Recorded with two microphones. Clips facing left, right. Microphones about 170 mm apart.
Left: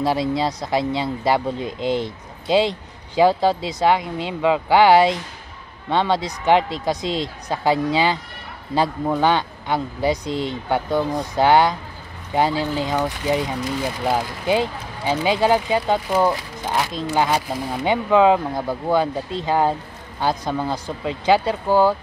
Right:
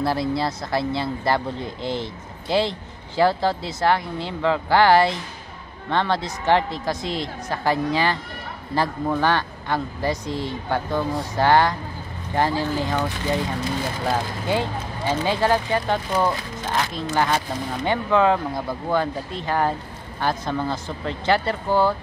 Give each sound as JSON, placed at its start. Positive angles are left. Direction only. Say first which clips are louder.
{"t": 0.0, "sound": "speech", "louder": "left 2 dB", "side_deg": 15}